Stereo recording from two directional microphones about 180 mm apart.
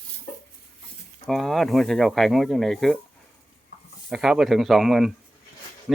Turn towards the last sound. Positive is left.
turn(degrees=0)  # may be behind; listen again after turning